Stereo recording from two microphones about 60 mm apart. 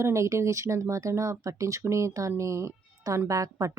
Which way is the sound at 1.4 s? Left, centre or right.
Right.